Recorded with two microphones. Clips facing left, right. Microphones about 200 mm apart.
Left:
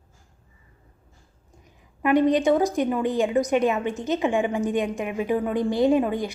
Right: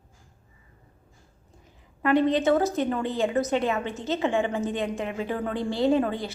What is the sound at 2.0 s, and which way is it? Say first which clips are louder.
A woman's voice: left 2 dB; 15° left (ahead or behind).